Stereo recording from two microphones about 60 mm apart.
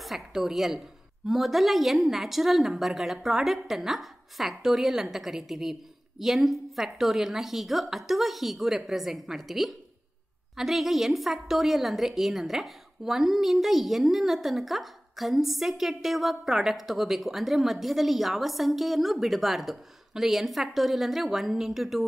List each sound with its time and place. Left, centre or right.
0.0 s a woman's voice: centre